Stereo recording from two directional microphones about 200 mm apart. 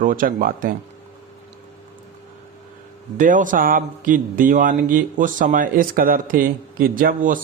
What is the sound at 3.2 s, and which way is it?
Speech, 40° right (ahead or behind).